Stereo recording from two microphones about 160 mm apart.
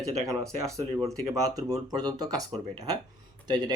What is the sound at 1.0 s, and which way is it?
Speech, 20° right (ahead or behind).